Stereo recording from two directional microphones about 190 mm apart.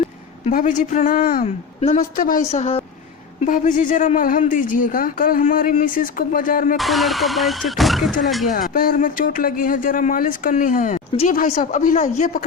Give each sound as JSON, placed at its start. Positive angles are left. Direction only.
{"t": 0.4, "sound": "speech", "side_deg": 40}
{"t": 6.7, "sound": "speech", "side_deg": 0}
{"t": 8.5, "sound": "speech", "side_deg": 50}